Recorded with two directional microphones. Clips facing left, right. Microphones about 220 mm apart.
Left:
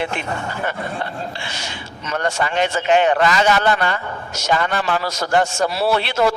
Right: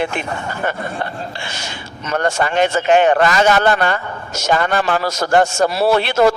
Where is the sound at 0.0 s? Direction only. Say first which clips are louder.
Right 2 dB; 45° right (ahead or behind).